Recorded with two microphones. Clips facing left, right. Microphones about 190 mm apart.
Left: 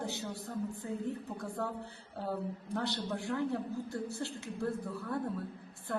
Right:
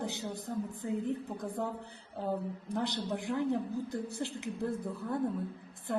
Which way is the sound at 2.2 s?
15° right (ahead or behind).